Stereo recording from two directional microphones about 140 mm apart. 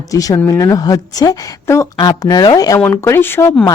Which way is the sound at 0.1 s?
25° left (ahead or behind).